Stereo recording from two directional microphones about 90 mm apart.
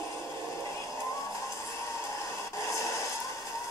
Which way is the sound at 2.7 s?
35° left (ahead or behind).